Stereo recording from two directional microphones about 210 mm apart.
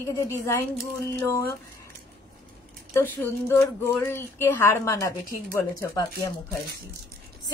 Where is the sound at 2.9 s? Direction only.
10° left (ahead or behind).